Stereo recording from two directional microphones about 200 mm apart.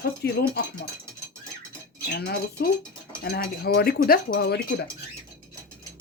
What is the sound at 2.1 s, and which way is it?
Speech, 55° left (ahead or behind).